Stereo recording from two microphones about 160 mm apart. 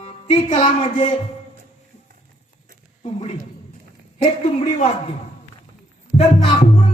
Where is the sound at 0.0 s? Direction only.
40° left (ahead or behind).